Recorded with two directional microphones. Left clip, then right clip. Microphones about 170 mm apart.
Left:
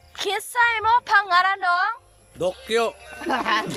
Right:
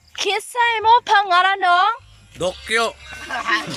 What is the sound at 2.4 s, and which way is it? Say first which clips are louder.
Speech: right 2 dB; 20° left (ahead or behind).